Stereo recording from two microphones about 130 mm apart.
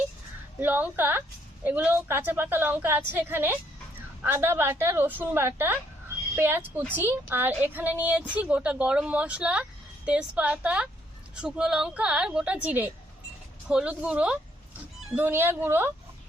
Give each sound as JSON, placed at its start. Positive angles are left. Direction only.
{"t": 0.6, "sound": "a woman's voice", "side_deg": -15}